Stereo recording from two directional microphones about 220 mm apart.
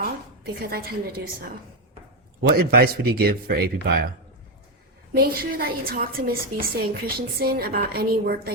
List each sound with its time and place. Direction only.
0.6 s a woman's voice: 45° right (ahead or behind)
5.1 s a woman's voice: 45° right (ahead or behind)